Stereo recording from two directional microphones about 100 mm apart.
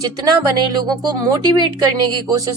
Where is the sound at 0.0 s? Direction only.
40° right (ahead or behind).